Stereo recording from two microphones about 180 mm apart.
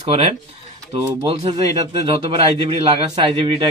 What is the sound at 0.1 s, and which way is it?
A man's voice, 35° right (ahead or behind).